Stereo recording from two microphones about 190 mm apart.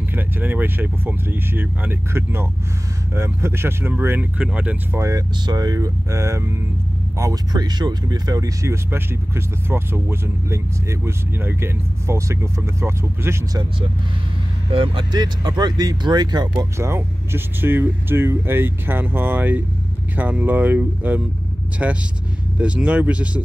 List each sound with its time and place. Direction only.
0.1 s speech: 10° right (ahead or behind)